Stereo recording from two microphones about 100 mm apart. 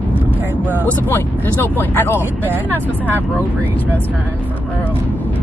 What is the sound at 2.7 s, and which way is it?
Speech, 20° left (ahead or behind).